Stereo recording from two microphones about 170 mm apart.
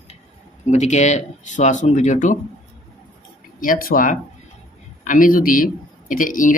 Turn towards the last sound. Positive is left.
turn(degrees=50)  # may be behind; listen again after turning